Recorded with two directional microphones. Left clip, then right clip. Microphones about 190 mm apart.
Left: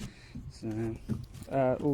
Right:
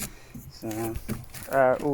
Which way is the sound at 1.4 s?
15° left (ahead or behind).